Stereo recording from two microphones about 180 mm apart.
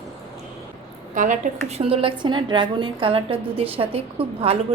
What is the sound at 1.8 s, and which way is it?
A woman's voice, 30° right (ahead or behind).